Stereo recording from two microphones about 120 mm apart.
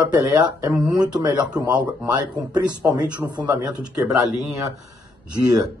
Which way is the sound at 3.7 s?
5° right (ahead or behind).